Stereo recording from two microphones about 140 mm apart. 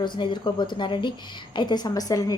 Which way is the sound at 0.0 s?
35° left (ahead or behind).